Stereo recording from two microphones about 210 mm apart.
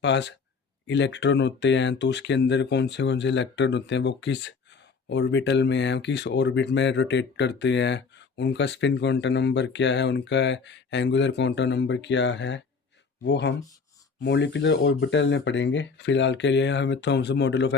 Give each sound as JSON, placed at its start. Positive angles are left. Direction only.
{"t": 0.0, "sound": "speech", "side_deg": 55}